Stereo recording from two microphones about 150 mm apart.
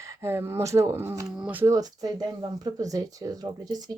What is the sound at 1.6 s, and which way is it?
Speech, 25° right (ahead or behind).